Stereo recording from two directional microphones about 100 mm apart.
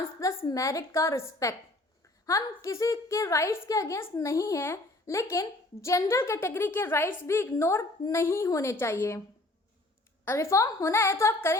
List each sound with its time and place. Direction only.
0.4 s a woman's voice: 35° left (ahead or behind)
10.2 s a woman's voice: 25° left (ahead or behind)